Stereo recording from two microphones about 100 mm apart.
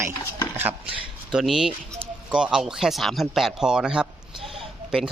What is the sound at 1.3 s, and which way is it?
A man's voice, 5° right (ahead or behind).